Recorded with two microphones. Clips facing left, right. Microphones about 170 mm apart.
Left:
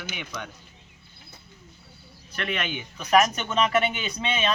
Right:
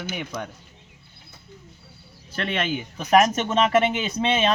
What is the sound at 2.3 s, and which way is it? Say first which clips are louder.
Speech: right 4 dB; 35° right (ahead or behind).